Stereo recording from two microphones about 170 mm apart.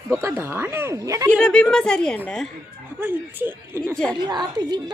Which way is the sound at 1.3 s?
5° left (ahead or behind).